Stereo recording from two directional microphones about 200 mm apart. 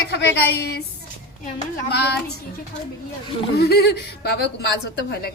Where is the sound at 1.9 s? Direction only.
55° left (ahead or behind).